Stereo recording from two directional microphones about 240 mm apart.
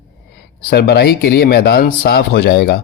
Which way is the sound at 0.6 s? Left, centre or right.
Left.